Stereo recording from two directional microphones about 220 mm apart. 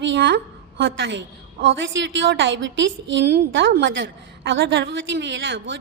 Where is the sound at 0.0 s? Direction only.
55° right (ahead or behind).